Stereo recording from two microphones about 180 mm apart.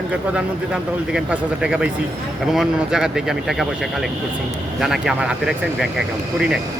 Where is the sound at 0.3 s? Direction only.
5° right (ahead or behind).